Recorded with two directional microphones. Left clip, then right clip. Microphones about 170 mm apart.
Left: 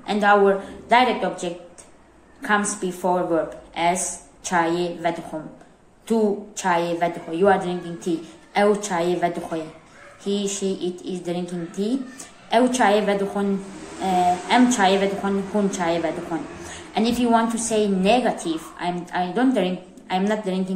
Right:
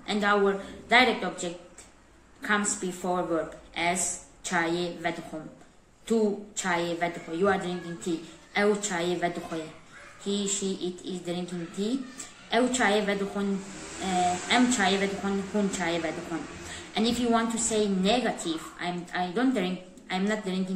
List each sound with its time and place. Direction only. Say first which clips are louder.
0.0 s a woman's voice: left 8 dB; 15° right (ahead or behind)
10.7 s a woman's voice: left 6 dB; 15° left (ahead or behind)
11.2 s a woman's voice: left 6 dB; 15° right (ahead or behind)